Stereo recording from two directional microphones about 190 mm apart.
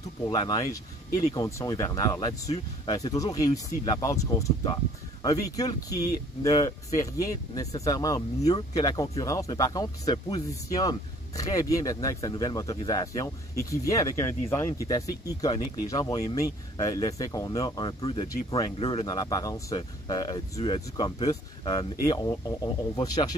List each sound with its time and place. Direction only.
0.3 s speech: 20° left (ahead or behind)